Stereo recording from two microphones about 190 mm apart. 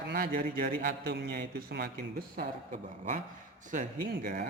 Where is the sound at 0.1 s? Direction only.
50° right (ahead or behind).